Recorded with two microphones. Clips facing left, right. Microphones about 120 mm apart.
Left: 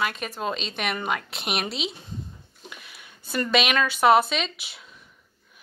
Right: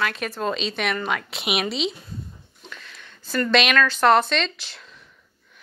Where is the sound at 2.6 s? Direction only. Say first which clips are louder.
Right 2 dB; 15° left (ahead or behind).